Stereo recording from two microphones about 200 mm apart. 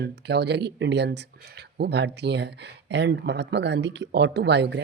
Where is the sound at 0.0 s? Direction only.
55° right (ahead or behind).